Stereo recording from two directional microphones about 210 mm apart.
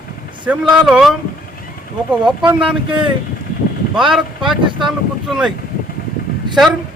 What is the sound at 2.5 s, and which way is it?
Speech, centre (ahead or behind).